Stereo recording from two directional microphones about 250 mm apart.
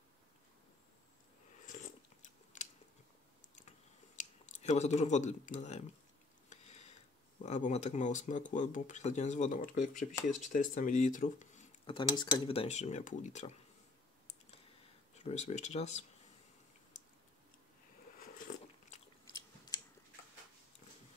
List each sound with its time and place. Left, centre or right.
4.2 s speech: left
6.5 s sniff: left
7.4 s speech: left
15.1 s speech: left
18.9 s chewing: left